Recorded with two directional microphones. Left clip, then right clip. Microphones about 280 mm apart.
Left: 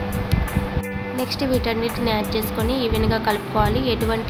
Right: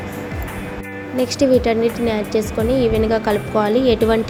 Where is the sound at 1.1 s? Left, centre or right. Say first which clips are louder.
Right 8 dB; centre.